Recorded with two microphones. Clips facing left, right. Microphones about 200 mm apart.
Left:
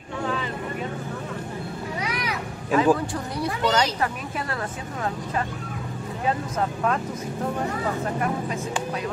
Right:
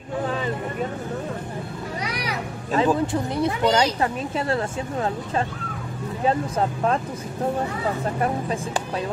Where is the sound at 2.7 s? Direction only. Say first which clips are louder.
Even; 25° right (ahead or behind).